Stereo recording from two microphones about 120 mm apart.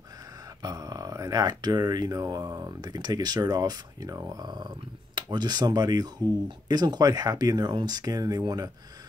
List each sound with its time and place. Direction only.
0.6 s speech: 30° right (ahead or behind)